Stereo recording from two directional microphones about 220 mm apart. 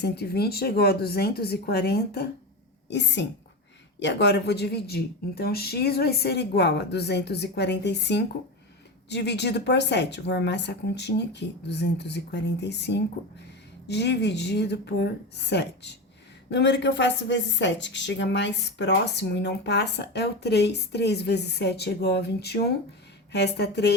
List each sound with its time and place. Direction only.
0.0 s speech: 45° left (ahead or behind)